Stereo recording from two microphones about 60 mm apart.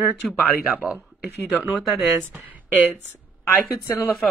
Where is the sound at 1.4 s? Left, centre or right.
Centre.